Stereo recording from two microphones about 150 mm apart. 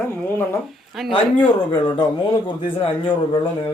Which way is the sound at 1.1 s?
30° left (ahead or behind).